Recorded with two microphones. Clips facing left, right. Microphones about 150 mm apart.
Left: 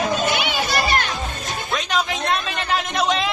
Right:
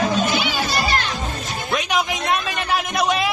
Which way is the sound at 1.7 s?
10° right (ahead or behind).